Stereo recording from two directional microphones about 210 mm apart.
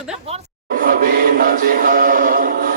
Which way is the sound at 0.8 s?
45° right (ahead or behind).